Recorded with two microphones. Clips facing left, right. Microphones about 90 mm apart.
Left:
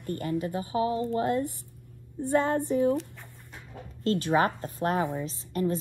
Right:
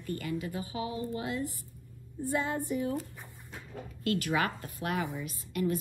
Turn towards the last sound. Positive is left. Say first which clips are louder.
# left 3 dB
turn(degrees=30)  # may be behind; listen again after turning